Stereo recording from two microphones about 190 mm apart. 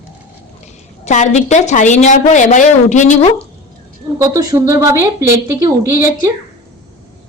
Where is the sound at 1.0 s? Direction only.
40° left (ahead or behind).